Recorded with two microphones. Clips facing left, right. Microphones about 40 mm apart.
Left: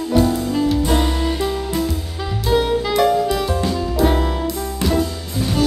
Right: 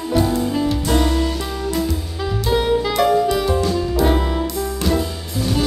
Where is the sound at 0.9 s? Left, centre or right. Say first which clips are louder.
Right 1 dB; centre.